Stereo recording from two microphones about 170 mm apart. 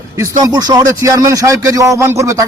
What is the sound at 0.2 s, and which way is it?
A man's voice, 20° right (ahead or behind).